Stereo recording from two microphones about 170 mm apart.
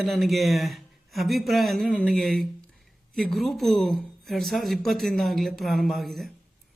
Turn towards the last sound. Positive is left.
turn(degrees=0)  # may be behind; listen again after turning